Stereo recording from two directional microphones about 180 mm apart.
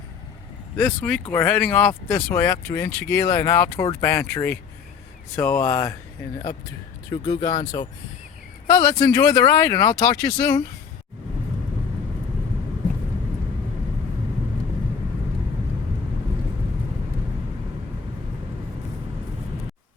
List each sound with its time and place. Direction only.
0.8 s speech: 10° left (ahead or behind)
7.3 s speech: 20° left (ahead or behind)